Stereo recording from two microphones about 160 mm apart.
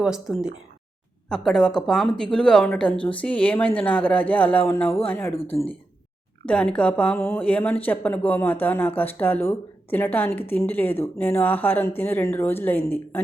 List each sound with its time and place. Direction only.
0.0 s speech: 5° right (ahead or behind)
5.3 s speech: 35° left (ahead or behind)
6.4 s speech: 5° left (ahead or behind)